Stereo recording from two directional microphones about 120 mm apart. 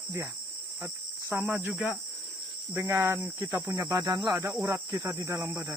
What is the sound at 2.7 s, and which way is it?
Cricket, 25° right (ahead or behind).